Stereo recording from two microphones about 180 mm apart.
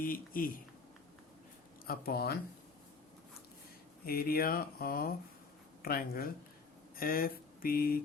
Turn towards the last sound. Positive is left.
turn(degrees=55)  # may be behind; listen again after turning